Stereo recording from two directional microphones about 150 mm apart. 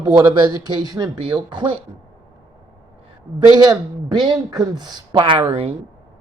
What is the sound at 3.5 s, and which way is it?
A man's voice, 30° right (ahead or behind).